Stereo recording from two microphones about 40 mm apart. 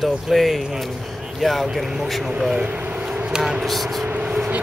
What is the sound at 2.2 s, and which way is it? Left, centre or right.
Speech, centre.